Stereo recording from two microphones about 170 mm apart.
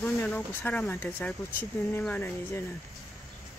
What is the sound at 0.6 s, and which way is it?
Speech, 10° left (ahead or behind).